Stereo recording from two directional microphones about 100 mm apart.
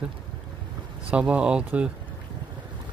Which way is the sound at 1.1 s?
10° right (ahead or behind).